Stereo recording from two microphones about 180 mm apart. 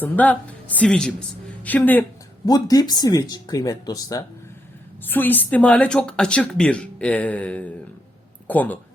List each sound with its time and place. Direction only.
0.0 s speech: 10° left (ahead or behind)
2.5 s speech: 20° left (ahead or behind)